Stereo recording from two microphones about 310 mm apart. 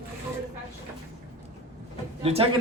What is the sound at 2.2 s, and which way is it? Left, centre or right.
Speech, centre.